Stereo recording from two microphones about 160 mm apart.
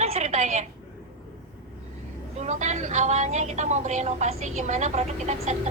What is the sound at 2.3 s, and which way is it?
A woman's voice, 45° right (ahead or behind).